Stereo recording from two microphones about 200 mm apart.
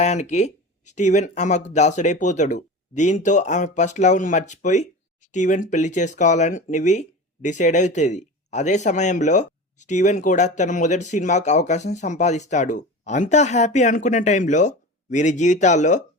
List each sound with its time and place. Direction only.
0.0 s speech: 35° left (ahead or behind)